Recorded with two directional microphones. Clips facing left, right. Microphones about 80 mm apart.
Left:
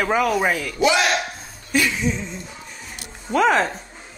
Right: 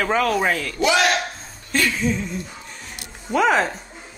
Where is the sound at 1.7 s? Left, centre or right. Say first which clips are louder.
Even; centre.